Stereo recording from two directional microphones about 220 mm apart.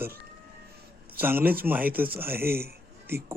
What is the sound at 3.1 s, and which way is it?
Speech, 45° right (ahead or behind).